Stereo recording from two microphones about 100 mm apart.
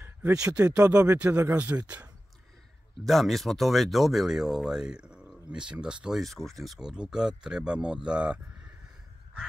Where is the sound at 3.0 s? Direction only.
Centre (ahead or behind).